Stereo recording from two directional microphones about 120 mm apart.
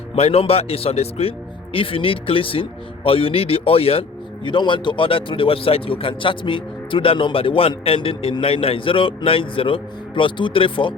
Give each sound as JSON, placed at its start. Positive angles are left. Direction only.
{"t": 0.2, "sound": "a man's voice", "side_deg": 55}
{"t": 4.4, "sound": "speech", "side_deg": 40}